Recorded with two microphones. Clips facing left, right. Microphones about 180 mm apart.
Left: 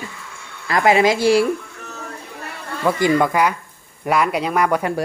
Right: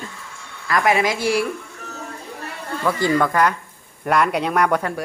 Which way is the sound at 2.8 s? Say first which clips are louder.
Left 2 dB; 15° left (ahead or behind).